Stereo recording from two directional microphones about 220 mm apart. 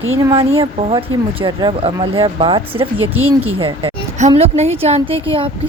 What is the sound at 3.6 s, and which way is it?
Speech, 25° right (ahead or behind).